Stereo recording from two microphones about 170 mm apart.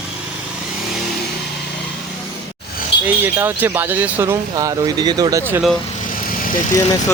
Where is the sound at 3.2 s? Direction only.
10° right (ahead or behind).